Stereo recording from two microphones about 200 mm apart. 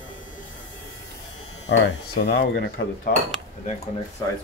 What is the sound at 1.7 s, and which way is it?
Speech, 65° left (ahead or behind).